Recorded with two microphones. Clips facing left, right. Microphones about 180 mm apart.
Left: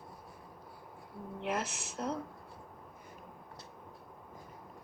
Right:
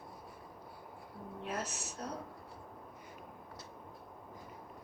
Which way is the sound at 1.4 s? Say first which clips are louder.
Left 4 dB; 90° left.